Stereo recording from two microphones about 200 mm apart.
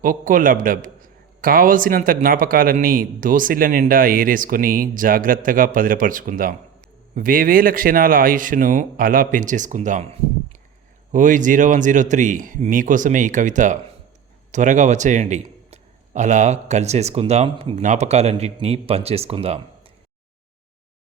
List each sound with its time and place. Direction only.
0.0 s a man's voice: 40° right (ahead or behind)